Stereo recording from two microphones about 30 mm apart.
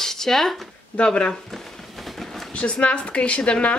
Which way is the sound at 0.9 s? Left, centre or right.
Left.